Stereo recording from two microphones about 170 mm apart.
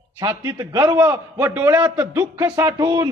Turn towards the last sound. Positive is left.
turn(degrees=-20)  # may be behind; listen again after turning